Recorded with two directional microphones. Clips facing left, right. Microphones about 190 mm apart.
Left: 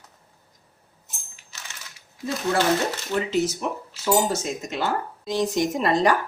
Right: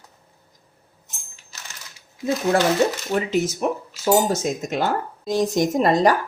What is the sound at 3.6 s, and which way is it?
Speech, 50° right (ahead or behind).